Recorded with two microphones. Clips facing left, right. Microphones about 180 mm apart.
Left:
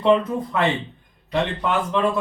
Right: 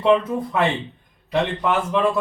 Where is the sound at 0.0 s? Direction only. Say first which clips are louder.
Even; 5° right (ahead or behind).